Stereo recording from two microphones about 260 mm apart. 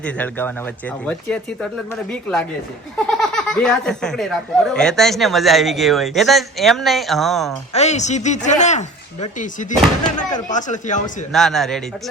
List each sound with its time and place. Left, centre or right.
0.0 s speech: centre
3.2 s speech: centre
7.7 s speech: left
11.3 s speech: centre